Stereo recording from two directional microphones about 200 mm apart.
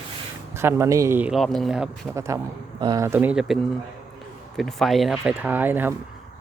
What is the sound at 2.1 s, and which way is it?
Speech, 15° right (ahead or behind).